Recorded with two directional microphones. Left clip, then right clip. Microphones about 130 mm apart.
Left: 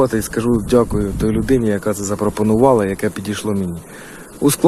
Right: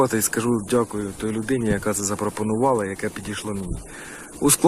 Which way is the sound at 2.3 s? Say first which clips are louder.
Left 9 dB; 15° left (ahead or behind).